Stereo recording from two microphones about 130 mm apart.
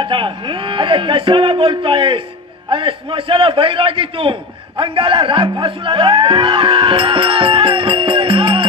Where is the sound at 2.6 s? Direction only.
40° right (ahead or behind).